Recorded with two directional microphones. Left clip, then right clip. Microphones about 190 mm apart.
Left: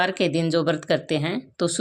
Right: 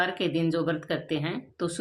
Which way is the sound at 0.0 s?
40° left (ahead or behind).